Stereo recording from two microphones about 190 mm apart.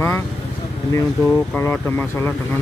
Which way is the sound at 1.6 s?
10° left (ahead or behind).